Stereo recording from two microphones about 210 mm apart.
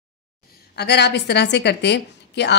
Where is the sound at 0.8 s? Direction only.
50° left (ahead or behind).